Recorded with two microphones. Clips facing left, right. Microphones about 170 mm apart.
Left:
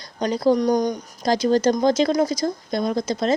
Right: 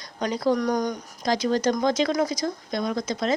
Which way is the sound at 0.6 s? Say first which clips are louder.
Left 5 dB; 20° left (ahead or behind).